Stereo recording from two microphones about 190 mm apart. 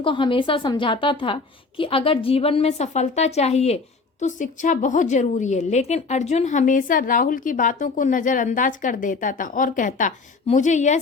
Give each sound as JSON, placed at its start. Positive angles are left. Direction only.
{"t": 0.0, "sound": "a woman's voice", "side_deg": 25}